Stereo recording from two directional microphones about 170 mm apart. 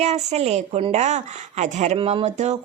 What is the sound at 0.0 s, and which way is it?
A woman's voice, 40° right (ahead or behind).